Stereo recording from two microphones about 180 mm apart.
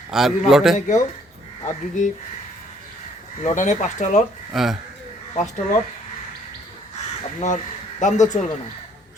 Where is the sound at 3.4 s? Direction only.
45° left (ahead or behind).